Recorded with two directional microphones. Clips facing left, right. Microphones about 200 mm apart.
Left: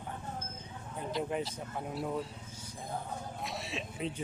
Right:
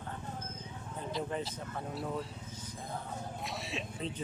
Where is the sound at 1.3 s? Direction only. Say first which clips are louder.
Left 2 dB; 5° left (ahead or behind).